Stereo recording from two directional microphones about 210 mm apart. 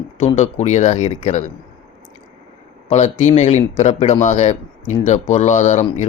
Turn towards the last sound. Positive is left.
turn(degrees=35)  # may be behind; listen again after turning